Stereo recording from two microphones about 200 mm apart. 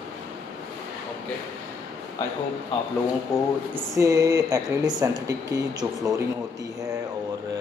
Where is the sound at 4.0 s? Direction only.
15° right (ahead or behind).